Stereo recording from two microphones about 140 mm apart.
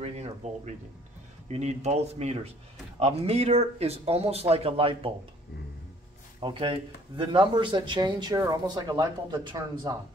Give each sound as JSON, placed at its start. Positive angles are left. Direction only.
{"t": 1.5, "sound": "speech", "side_deg": -50}
{"t": 6.4, "sound": "speech", "side_deg": -35}